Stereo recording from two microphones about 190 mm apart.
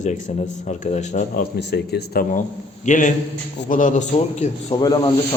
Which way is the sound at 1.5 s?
60° left (ahead or behind).